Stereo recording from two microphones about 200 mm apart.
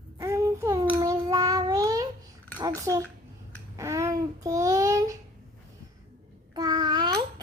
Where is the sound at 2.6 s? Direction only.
20° right (ahead or behind).